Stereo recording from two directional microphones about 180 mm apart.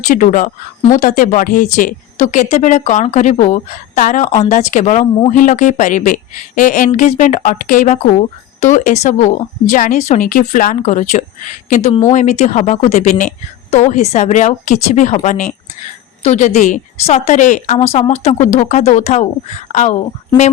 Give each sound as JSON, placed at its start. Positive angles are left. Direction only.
{"t": 0.0, "sound": "a woman's voice", "side_deg": 45}